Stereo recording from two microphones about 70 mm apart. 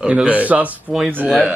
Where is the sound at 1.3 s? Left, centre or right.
Centre.